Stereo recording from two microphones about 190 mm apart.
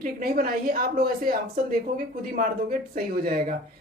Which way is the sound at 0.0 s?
50° right (ahead or behind).